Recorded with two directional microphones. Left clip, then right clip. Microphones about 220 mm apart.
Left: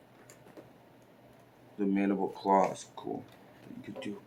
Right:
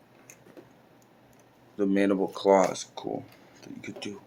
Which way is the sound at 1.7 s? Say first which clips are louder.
Right 6 dB; 55° right (ahead or behind).